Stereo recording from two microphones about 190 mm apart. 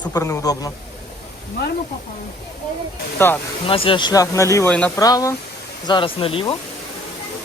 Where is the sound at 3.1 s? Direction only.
10° left (ahead or behind).